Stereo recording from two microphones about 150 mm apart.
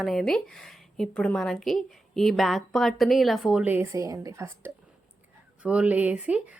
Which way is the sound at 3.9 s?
20° right (ahead or behind).